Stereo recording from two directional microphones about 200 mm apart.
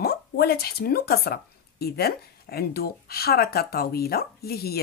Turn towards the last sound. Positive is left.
turn(degrees=50)  # may be behind; listen again after turning